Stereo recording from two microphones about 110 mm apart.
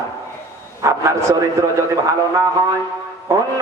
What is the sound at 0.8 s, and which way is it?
Speech, 25° right (ahead or behind).